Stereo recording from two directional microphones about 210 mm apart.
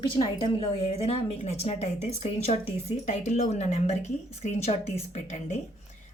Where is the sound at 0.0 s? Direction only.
25° left (ahead or behind).